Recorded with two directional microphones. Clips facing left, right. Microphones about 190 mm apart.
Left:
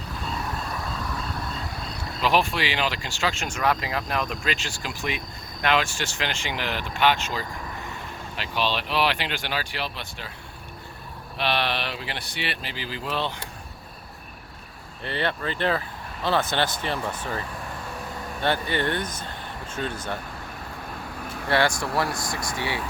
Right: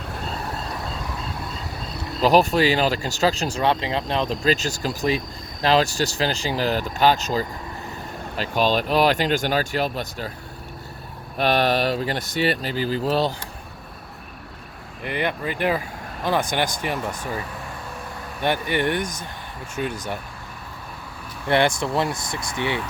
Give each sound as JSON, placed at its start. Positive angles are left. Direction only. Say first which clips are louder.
{"t": 2.2, "sound": "speech", "louder": "right 7 dB", "side_deg": -40}
{"t": 11.3, "sound": "speech", "louder": "right 7 dB", "side_deg": -45}
{"t": 15.0, "sound": "speech", "louder": "right 2 dB", "side_deg": -15}
{"t": 18.4, "sound": "speech", "louder": "right 3 dB", "side_deg": -15}
{"t": 21.5, "sound": "speech", "louder": "right 3 dB", "side_deg": -20}